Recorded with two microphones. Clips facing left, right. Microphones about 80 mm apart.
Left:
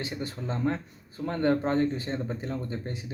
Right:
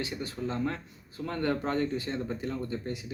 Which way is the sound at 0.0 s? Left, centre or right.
Left.